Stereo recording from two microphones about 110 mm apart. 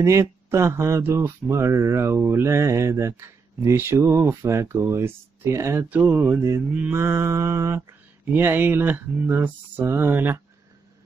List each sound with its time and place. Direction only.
0.0 s speech: 25° right (ahead or behind)
5.9 s mantra: 15° right (ahead or behind)
6.8 s speech: 20° right (ahead or behind)